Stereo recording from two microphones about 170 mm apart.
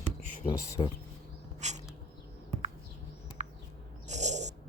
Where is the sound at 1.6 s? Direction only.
40° right (ahead or behind).